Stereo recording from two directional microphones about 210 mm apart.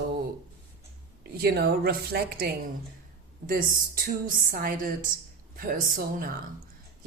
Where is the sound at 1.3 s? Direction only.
50° right (ahead or behind).